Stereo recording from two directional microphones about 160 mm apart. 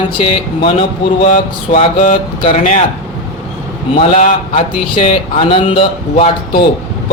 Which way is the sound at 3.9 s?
40° left (ahead or behind).